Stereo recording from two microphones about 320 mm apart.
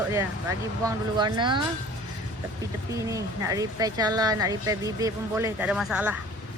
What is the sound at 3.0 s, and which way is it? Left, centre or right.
Speech, centre.